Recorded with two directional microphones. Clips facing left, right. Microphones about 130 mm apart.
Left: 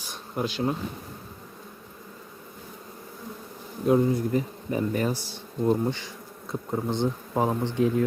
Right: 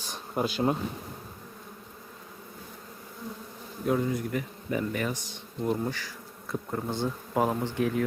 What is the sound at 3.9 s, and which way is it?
Speech, 25° left (ahead or behind).